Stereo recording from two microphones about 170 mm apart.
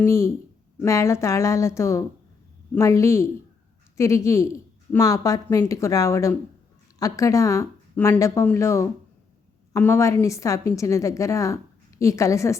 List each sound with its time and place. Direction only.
0.0 s a woman's voice: 20° left (ahead or behind)